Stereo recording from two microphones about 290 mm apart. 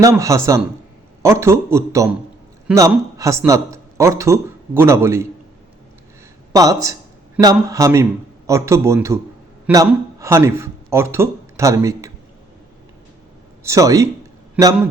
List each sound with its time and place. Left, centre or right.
0.0 s speech: centre
6.5 s speech: centre
13.7 s a man's voice: centre